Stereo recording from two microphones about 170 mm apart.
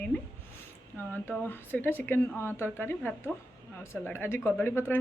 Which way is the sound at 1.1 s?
10° left (ahead or behind).